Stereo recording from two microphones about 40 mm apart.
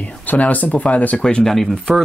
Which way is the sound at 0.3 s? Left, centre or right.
Left.